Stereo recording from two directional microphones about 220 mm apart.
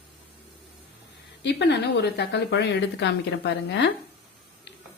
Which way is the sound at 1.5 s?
50° left (ahead or behind).